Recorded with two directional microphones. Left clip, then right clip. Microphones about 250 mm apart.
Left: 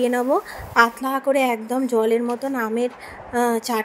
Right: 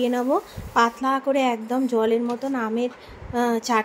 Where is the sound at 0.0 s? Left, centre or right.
Left.